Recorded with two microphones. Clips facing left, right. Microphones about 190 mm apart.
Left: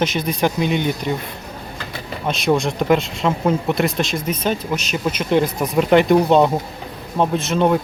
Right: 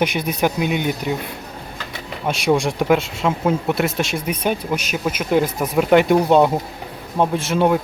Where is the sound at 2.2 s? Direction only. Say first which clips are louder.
Even; 10° right (ahead or behind).